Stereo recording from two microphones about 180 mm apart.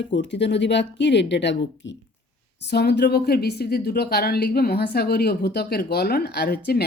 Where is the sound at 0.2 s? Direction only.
75° left (ahead or behind).